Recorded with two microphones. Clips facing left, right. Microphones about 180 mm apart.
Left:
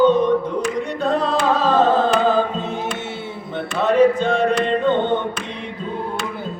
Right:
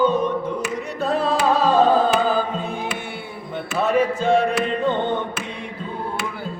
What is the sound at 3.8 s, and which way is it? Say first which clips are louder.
Mantra: left 4 dB; 5° right (ahead or behind).